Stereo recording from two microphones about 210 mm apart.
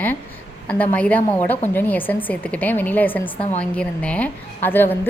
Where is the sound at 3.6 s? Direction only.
5° left (ahead or behind).